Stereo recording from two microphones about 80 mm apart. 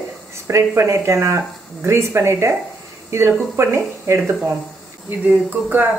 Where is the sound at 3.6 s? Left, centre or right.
Right.